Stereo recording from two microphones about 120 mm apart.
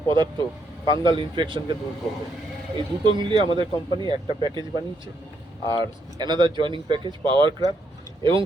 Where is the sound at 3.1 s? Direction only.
40° right (ahead or behind).